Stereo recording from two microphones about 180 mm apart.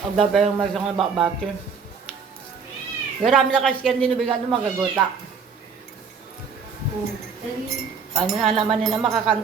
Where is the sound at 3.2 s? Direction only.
5° left (ahead or behind).